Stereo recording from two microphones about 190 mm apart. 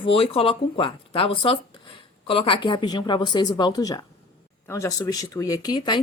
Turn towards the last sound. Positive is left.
turn(degrees=25)  # may be behind; listen again after turning